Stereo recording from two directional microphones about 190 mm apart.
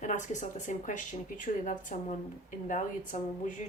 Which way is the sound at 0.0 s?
40° left (ahead or behind).